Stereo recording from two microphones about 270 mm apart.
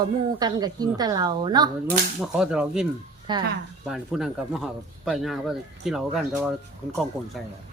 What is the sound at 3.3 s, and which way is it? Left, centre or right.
Speech, centre.